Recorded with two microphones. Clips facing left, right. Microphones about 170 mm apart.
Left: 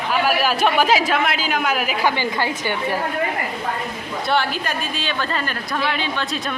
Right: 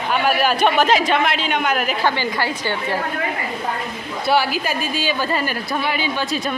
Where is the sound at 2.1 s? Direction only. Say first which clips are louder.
Even; 15° left (ahead or behind).